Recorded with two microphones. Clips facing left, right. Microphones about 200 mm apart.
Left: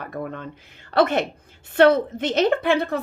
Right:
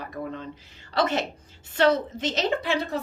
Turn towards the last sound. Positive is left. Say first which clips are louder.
# left 5 dB
turn(degrees=55)  # may be behind; listen again after turning